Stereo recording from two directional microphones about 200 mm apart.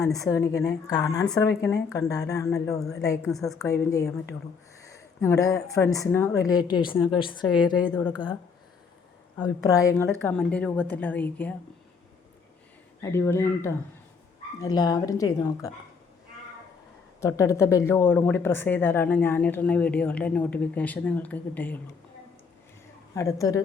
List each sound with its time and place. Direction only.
0.1 s speech: 15° left (ahead or behind)
3.2 s a woman's voice: centre (ahead or behind)
3.6 s speech: 15° left (ahead or behind)
5.2 s a woman's voice: 15° left (ahead or behind)
9.4 s speech: 15° left (ahead or behind)
10.2 s speech: 5° left (ahead or behind)
13.0 s speech: 15° left (ahead or behind)
17.2 s speech: 15° left (ahead or behind)
23.1 s speech: 15° left (ahead or behind)